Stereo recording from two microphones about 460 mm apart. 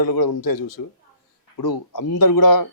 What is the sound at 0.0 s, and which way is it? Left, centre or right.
Speech, left.